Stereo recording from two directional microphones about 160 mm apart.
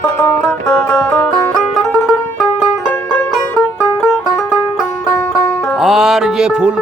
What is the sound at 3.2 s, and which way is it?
Music, 10° left (ahead or behind).